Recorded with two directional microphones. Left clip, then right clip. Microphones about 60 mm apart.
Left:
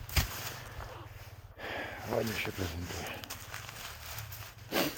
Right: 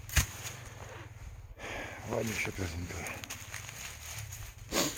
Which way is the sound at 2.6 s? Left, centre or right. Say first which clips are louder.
Left 1 dB; centre.